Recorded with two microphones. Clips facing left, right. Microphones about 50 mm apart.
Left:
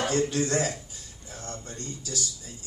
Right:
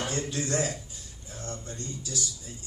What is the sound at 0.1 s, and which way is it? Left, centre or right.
A man's voice, left.